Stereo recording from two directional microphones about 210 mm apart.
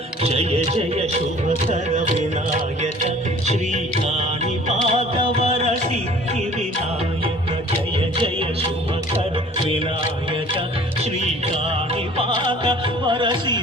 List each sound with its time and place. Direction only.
0.2 s music: 30° right (ahead or behind)
3.4 s music: 35° right (ahead or behind)
4.9 s music: 30° right (ahead or behind)
12.1 s music: 25° right (ahead or behind)